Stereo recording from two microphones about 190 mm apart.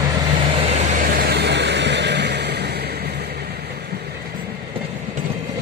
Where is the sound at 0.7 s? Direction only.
45° right (ahead or behind); by 2.8 s 60° right (ahead or behind).